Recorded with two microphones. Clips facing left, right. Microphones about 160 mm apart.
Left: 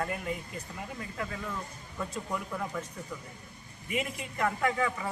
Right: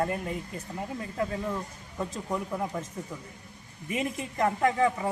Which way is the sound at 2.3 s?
25° right (ahead or behind).